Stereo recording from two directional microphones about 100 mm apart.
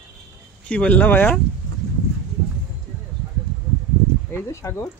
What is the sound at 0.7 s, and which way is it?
Speech, 15° left (ahead or behind).